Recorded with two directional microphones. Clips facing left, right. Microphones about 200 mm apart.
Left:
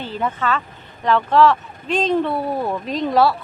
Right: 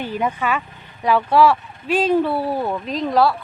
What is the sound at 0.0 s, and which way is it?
Speech, 15° right (ahead or behind).